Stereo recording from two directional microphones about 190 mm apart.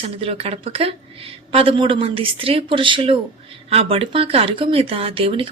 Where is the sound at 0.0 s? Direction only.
30° right (ahead or behind).